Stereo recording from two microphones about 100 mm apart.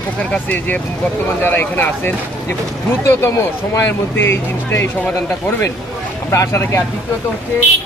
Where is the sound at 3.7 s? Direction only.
25° left (ahead or behind).